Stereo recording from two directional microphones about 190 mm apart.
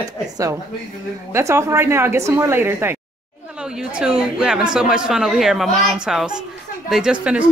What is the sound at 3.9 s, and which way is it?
Speech, 5° right (ahead or behind).